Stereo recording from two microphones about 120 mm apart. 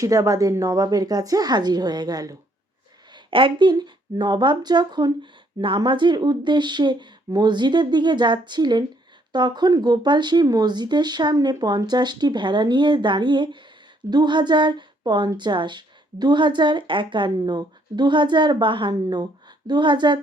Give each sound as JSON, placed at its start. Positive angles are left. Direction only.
{"t": 0.0, "sound": "a woman's voice", "side_deg": -30}
{"t": 3.1, "sound": "a woman's voice", "side_deg": -45}